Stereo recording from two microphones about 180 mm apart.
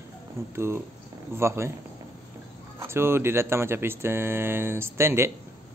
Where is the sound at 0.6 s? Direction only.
15° right (ahead or behind).